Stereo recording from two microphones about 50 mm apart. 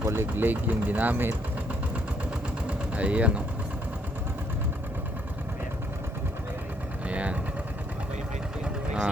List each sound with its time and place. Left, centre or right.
0.0 s speech: right
0.5 s speech: right
2.6 s vehicle: right
7.1 s vehicle: right
8.6 s vehicle: centre